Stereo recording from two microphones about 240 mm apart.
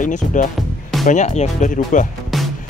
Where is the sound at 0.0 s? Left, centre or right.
Left.